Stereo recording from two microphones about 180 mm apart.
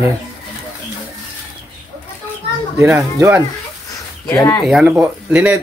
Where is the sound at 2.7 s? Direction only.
15° right (ahead or behind).